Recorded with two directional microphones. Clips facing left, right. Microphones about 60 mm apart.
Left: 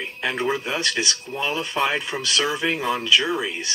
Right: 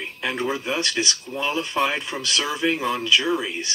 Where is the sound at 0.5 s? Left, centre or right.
Centre.